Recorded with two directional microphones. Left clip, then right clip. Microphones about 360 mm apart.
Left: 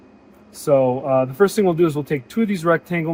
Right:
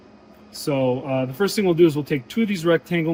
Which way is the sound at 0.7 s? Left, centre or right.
Centre.